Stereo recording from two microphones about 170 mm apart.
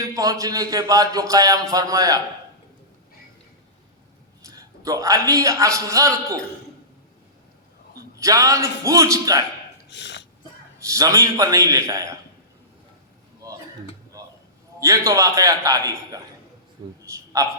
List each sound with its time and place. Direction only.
0.0 s a man's voice: 20° right (ahead or behind)
4.4 s a man's voice: 20° right (ahead or behind)
8.2 s a man's voice: 20° right (ahead or behind)
9.9 s a sound: 90° left
10.8 s a man's voice: 20° right (ahead or behind)
13.4 s a sound: 20° right (ahead or behind)
14.8 s a man's voice: 20° right (ahead or behind)